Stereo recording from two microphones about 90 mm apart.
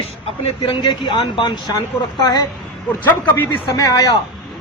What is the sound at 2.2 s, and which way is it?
Speech, 45° left (ahead or behind).